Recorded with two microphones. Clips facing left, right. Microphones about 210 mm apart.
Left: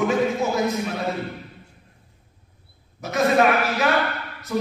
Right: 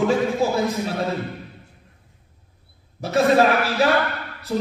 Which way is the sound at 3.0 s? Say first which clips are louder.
Right 2 dB; 30° right (ahead or behind).